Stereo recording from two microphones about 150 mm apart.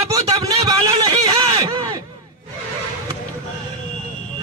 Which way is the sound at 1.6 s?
25° right (ahead or behind).